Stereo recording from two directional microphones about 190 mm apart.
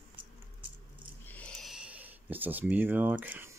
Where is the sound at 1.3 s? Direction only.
5° left (ahead or behind).